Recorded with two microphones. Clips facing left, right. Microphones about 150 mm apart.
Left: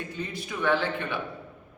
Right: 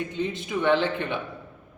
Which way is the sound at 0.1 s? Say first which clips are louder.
Right 6 dB; 20° right (ahead or behind).